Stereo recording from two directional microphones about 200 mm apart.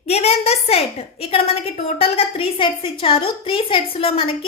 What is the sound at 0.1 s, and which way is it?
A woman's voice, 30° left (ahead or behind).